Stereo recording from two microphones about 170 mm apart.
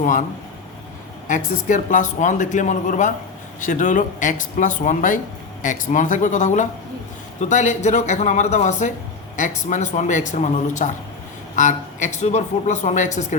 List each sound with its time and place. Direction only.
0.0 s a woman's voice: 50° left (ahead or behind)
1.3 s a woman's voice: 50° left (ahead or behind)